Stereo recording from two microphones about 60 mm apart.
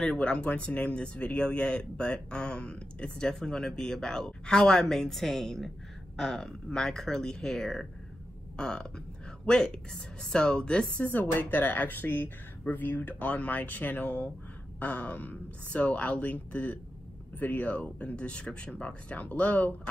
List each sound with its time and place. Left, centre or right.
0.0 s speech: centre
11.1 s speech: left